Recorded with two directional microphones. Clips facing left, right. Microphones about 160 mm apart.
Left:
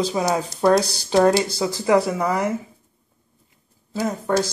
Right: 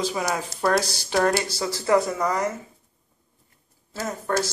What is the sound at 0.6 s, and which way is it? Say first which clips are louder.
Speech: left 5 dB; 20° left (ahead or behind).